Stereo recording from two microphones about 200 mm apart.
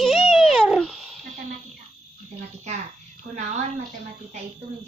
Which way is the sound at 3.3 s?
35° right (ahead or behind).